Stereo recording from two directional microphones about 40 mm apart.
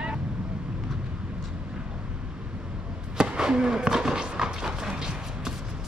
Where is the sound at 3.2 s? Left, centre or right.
Centre.